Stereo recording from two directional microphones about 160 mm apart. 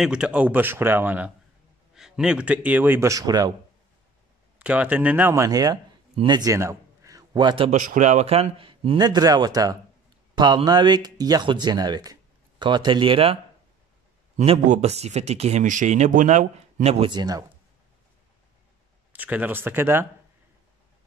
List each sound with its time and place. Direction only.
0.0 s speech: 5° right (ahead or behind); by 3.5 s 25° right (ahead or behind)
4.6 s a man's voice: 10° right (ahead or behind); by 7.7 s 30° right (ahead or behind)
7.7 s speech: 50° right (ahead or behind)
17.1 s speech: 25° right (ahead or behind)
19.1 s speech: 10° right (ahead or behind)